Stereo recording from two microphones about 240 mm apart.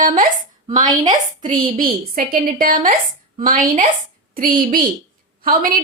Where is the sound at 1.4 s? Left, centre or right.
Right.